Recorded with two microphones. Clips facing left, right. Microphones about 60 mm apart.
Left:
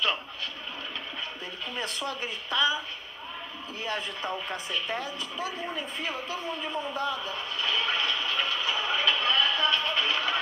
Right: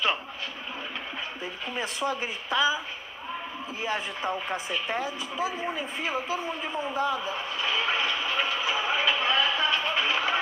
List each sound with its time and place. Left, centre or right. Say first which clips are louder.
1.7 s a woman's voice: right 4 dB; centre
3.8 s speech: right 3 dB; centre